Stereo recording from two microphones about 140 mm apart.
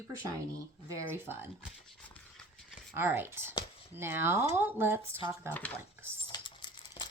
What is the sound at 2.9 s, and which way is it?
Speech, 15° right (ahead or behind).